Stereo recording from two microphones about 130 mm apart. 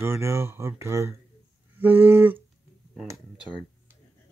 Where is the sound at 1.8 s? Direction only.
15° right (ahead or behind).